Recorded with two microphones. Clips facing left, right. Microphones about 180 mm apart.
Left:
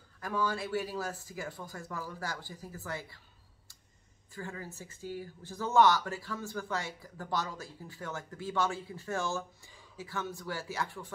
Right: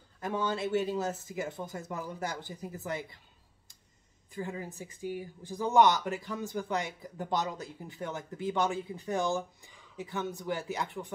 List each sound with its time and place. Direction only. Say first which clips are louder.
0.2 s speech: right 2 dB; 25° right (ahead or behind)
4.3 s speech: right 4 dB; 20° right (ahead or behind)